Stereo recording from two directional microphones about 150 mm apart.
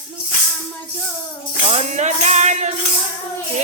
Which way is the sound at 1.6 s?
45° right (ahead or behind).